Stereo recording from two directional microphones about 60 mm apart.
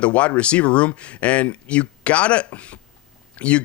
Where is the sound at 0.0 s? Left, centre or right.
Left.